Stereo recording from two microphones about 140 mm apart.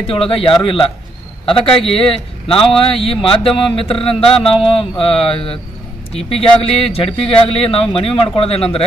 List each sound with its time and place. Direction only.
0.0 s speech: 40° left (ahead or behind)